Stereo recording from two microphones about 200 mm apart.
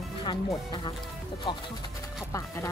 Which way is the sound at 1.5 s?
25° left (ahead or behind).